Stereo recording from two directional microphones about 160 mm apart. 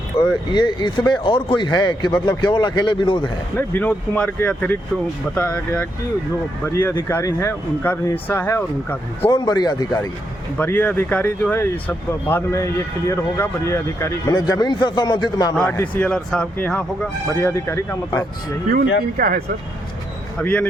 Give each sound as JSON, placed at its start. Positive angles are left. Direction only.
{"t": 0.2, "sound": "a man's voice", "side_deg": 30}
{"t": 3.6, "sound": "speech", "side_deg": 10}
{"t": 9.3, "sound": "a man's voice", "side_deg": 25}
{"t": 10.6, "sound": "speech", "side_deg": 10}
{"t": 15.7, "sound": "speech", "side_deg": 10}
{"t": 18.7, "sound": "speech", "side_deg": -60}
{"t": 20.4, "sound": "speech", "side_deg": 10}